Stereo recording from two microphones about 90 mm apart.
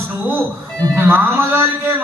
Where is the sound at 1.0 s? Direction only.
20° right (ahead or behind).